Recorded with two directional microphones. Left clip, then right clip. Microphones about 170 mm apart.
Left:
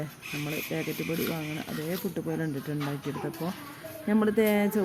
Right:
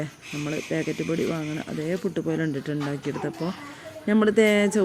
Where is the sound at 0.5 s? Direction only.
15° right (ahead or behind).